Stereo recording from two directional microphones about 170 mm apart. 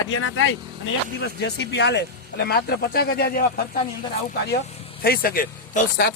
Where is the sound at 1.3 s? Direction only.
80° left; by 3.8 s 60° left (ahead or behind).